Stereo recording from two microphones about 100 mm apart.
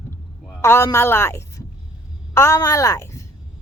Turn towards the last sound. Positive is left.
turn(degrees=30)  # may be behind; listen again after turning